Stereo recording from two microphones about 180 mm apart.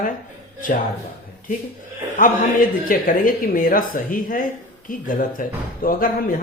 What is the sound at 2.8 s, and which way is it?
Speech, 50° left (ahead or behind).